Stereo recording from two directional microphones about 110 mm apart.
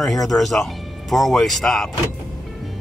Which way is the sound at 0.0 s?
Centre (ahead or behind).